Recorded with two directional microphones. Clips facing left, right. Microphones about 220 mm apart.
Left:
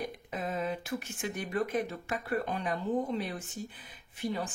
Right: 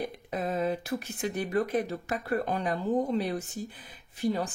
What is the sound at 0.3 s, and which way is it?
Speech, 40° right (ahead or behind).